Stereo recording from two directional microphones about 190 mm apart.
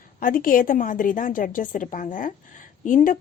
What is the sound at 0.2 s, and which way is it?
Speech, 50° left (ahead or behind).